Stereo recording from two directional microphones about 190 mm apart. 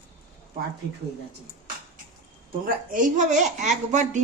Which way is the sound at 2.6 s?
45° right (ahead or behind).